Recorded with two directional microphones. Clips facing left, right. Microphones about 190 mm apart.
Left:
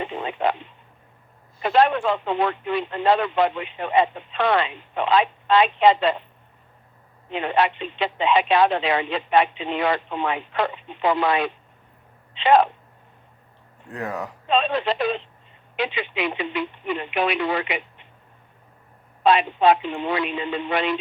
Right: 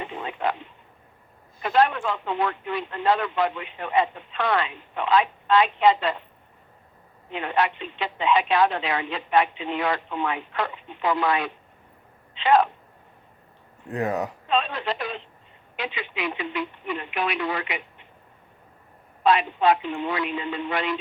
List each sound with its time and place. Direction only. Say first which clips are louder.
0.0 s a sound: left 4 dB; 25° left (ahead or behind)
1.7 s speech: left 3 dB; 25° left (ahead or behind)
7.3 s speech: left 3 dB; 25° left (ahead or behind)
13.9 s speech: right 4 dB; 20° right (ahead or behind)
14.4 s speech: left 7 dB; 25° left (ahead or behind)
19.2 s speech: left 3 dB; 25° left (ahead or behind)